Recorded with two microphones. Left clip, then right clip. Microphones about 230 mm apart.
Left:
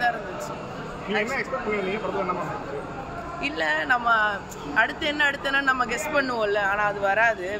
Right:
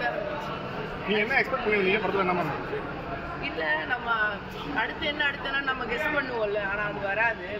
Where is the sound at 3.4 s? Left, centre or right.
Left.